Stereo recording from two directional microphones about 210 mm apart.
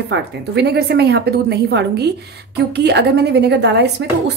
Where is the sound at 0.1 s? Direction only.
50° right (ahead or behind).